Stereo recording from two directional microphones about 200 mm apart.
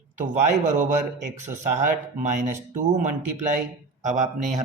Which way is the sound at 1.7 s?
40° right (ahead or behind).